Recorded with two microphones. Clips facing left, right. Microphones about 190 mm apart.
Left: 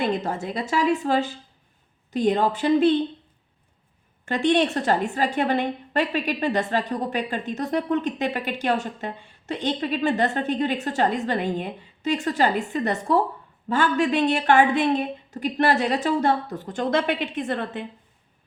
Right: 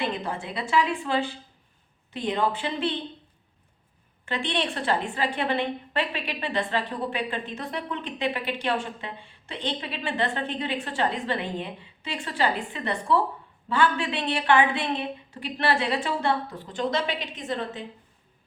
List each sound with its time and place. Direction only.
0.0 s a woman's voice: 45° left (ahead or behind)
4.3 s a woman's voice: 45° left (ahead or behind)